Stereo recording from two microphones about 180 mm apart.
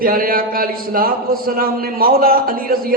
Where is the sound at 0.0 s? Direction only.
55° right (ahead or behind).